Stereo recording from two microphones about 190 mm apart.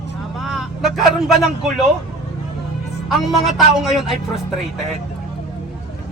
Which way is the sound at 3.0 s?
Centre (ahead or behind).